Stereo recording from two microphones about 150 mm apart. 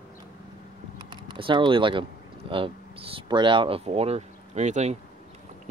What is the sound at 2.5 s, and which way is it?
Speech, 35° right (ahead or behind).